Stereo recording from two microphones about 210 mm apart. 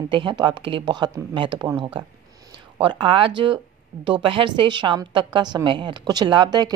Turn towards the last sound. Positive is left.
turn(degrees=-20)  # may be behind; listen again after turning